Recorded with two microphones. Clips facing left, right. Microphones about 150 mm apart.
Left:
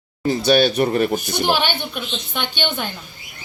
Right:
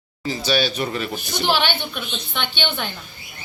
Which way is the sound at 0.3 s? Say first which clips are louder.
Left 6 dB; 55° left (ahead or behind).